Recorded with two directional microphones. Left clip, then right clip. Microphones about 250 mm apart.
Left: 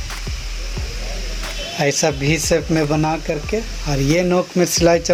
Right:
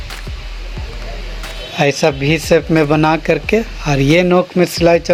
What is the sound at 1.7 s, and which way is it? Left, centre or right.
Speech, centre.